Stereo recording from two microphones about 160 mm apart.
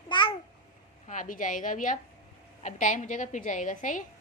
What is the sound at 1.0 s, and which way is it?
A woman's voice, 55° left (ahead or behind).